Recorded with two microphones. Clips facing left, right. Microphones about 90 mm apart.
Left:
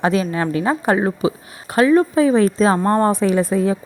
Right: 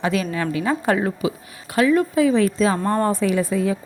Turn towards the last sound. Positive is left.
turn(degrees=30)  # may be behind; listen again after turning